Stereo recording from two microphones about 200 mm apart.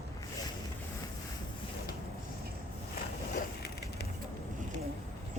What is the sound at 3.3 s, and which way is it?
Crushing, 55° left (ahead or behind).